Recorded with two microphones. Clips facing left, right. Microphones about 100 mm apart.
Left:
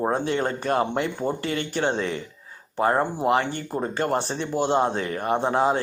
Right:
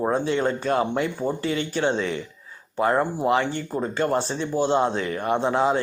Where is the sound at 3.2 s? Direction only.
50° left (ahead or behind).